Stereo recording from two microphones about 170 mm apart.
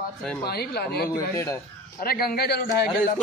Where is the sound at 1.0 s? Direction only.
15° left (ahead or behind).